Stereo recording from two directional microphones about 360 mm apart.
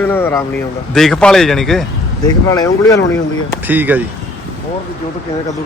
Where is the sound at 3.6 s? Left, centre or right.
Centre.